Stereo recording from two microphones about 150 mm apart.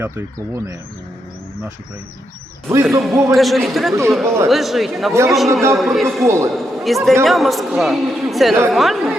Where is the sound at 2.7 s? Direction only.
20° right (ahead or behind).